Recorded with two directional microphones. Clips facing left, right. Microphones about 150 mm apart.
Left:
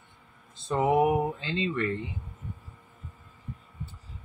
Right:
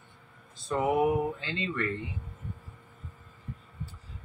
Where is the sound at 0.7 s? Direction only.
20° left (ahead or behind).